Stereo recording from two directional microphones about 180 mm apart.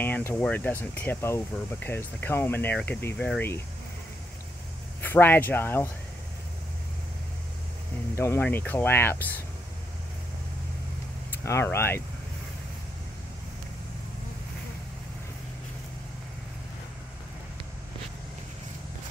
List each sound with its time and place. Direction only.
0.0 s speech: 10° left (ahead or behind)
5.0 s speech: 10° left (ahead or behind)
8.2 s speech: 10° left (ahead or behind)
11.4 s speech: 15° left (ahead or behind)